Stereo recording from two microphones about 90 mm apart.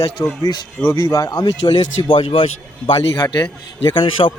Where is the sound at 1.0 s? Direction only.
40° left (ahead or behind).